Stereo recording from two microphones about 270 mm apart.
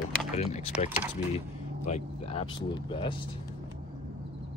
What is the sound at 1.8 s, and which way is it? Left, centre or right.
Speech, left.